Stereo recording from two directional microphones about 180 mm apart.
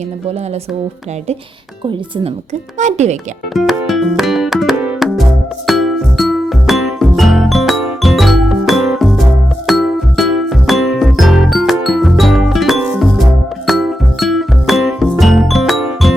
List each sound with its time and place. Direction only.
1.9 s speech: 25° right (ahead or behind)
2.7 s speech: 40° right (ahead or behind)
3.5 s music: centre (ahead or behind)